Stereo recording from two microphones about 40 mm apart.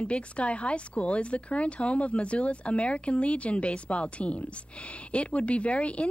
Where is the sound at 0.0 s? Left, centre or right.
Left.